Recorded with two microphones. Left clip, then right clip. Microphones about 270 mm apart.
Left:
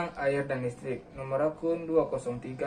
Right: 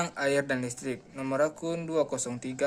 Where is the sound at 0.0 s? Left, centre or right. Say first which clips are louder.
Right 2 dB; right.